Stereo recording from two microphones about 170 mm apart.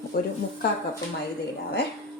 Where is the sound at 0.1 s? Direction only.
65° left (ahead or behind).